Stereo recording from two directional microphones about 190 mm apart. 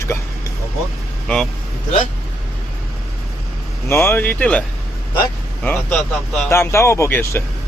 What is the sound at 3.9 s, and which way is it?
Speech, 10° left (ahead or behind).